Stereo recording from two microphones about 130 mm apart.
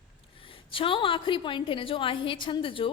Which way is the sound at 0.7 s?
40° left (ahead or behind).